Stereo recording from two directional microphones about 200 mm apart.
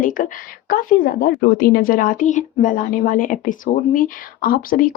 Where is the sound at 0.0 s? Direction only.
45° left (ahead or behind).